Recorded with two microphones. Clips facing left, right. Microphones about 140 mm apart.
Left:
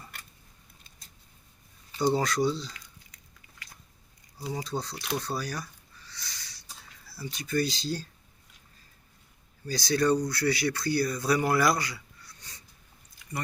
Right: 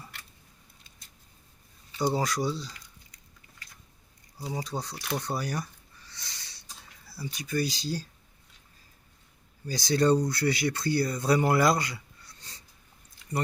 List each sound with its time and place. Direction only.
2.0 s speech: 10° right (ahead or behind)
4.4 s speech: 15° right (ahead or behind)
6.1 s a sound: 25° right (ahead or behind)
7.1 s speech: 15° right (ahead or behind)
9.6 s speech: 20° right (ahead or behind)